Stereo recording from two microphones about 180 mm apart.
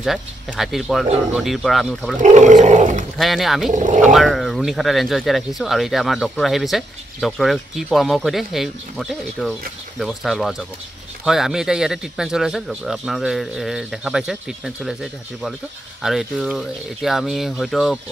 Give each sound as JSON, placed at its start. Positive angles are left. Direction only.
{"t": 0.0, "sound": "speech", "side_deg": 0}
{"t": 2.1, "sound": "roar", "side_deg": -40}
{"t": 3.2, "sound": "speech", "side_deg": 0}
{"t": 3.7, "sound": "roar", "side_deg": -45}
{"t": 4.0, "sound": "speech", "side_deg": 0}